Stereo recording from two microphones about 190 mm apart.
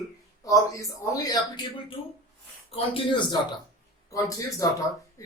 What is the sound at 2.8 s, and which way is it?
Speech, 25° left (ahead or behind).